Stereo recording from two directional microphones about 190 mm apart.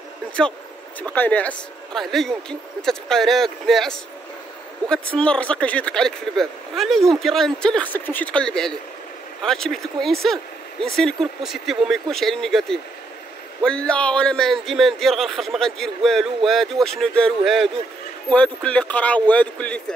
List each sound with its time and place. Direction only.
1.0 s a man's voice: 10° left (ahead or behind)